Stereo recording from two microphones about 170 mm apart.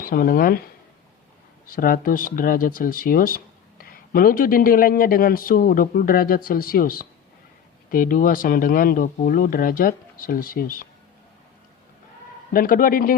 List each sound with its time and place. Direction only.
0.0 s speech: 55° left (ahead or behind)
1.7 s speech: 55° left (ahead or behind)
12.5 s speech: 55° left (ahead or behind)